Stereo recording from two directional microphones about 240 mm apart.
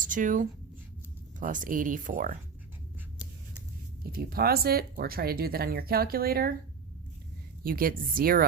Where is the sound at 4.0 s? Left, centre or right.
Right.